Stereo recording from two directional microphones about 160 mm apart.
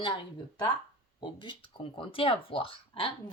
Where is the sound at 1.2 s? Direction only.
30° left (ahead or behind).